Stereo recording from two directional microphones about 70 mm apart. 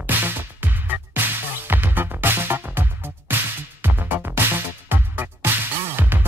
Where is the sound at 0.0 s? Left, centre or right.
Right.